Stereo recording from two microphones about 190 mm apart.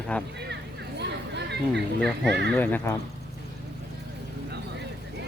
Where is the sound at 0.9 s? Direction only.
65° right (ahead or behind).